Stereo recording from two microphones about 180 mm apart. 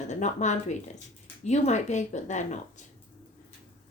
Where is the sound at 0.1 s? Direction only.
40° left (ahead or behind).